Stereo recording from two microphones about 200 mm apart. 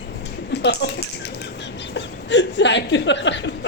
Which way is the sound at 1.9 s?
60° left (ahead or behind).